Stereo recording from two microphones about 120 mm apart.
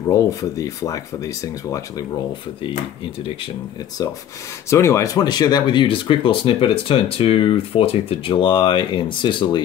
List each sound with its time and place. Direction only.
0.1 s speech: 30° left (ahead or behind)
4.0 s speech: 30° left (ahead or behind)